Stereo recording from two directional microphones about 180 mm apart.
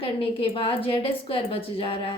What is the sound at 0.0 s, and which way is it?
A woman's voice, 30° left (ahead or behind).